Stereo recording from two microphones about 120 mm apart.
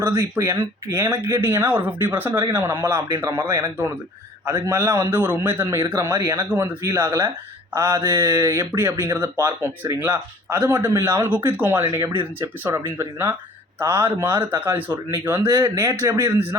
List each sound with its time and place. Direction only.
0.0 s speech: 30° right (ahead or behind)